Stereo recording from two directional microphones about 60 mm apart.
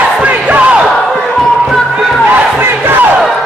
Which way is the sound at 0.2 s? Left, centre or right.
Right.